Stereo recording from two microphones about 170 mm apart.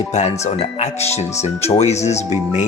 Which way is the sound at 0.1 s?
40° left (ahead or behind).